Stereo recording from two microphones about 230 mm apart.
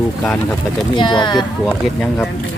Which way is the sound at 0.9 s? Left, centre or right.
Centre.